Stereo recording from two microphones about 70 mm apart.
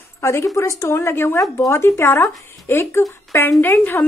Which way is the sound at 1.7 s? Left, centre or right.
Left.